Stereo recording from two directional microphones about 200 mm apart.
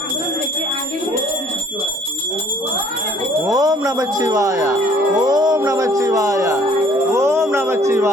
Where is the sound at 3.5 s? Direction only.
20° right (ahead or behind).